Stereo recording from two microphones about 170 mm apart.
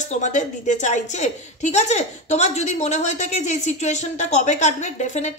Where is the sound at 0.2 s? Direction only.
45° left (ahead or behind).